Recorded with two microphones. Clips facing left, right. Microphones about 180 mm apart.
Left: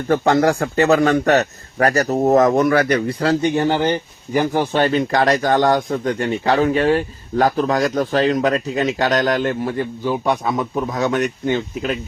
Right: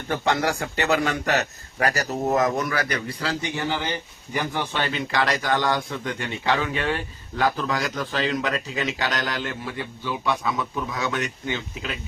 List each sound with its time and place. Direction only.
0.1 s a man's voice: 40° left (ahead or behind)